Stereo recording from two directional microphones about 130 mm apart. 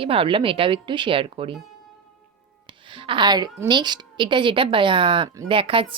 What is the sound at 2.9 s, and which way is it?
A woman's voice, 40° right (ahead or behind).